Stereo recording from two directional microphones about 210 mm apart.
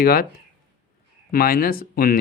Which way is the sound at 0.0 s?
45° left (ahead or behind).